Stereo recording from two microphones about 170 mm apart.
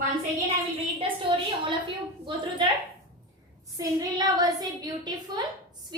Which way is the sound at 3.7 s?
20° right (ahead or behind).